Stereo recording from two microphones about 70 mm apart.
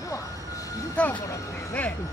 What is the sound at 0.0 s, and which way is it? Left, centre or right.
Music, left.